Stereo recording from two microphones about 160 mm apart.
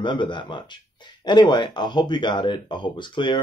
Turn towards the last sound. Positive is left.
turn(degrees=30)  # may be behind; listen again after turning